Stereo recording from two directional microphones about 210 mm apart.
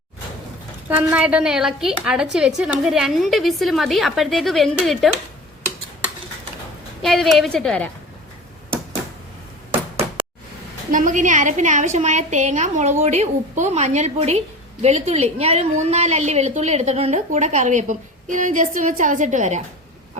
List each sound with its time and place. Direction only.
0.9 s a woman's voice: 10° right (ahead or behind)
7.0 s a woman's voice: centre (ahead or behind)
10.9 s a woman's voice: 35° right (ahead or behind)